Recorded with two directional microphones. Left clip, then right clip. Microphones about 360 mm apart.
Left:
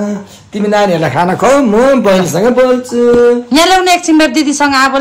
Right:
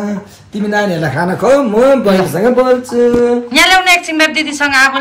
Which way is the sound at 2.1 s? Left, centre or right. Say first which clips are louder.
Left 2 dB; centre.